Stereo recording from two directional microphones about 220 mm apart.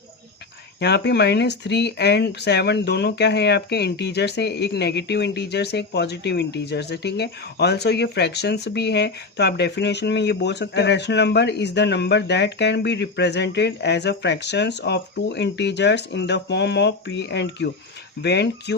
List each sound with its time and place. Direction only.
0.8 s speech: 50° left (ahead or behind)